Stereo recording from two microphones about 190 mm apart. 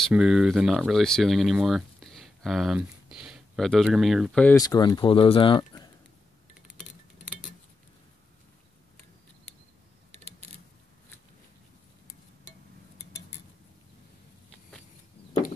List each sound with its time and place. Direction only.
0.0 s speech: 5° right (ahead or behind)
4.6 s speech: 20° left (ahead or behind)
6.8 s music: centre (ahead or behind)
10.1 s a sound: 35° right (ahead or behind)